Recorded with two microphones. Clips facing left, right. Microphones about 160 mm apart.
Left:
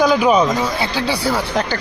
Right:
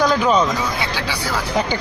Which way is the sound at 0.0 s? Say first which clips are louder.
Left 3 dB; 10° left (ahead or behind).